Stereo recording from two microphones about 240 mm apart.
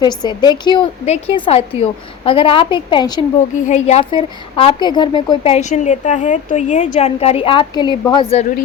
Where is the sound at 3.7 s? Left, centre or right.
Left.